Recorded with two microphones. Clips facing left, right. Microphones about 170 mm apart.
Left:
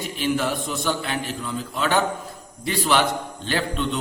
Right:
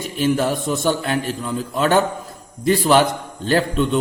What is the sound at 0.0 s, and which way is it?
A man's voice, 45° right (ahead or behind).